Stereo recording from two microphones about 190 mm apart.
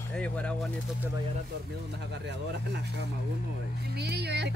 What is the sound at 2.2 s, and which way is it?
Speech, 65° right (ahead or behind).